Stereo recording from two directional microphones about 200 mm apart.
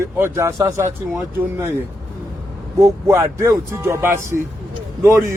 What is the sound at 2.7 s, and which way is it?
Speech, 15° right (ahead or behind).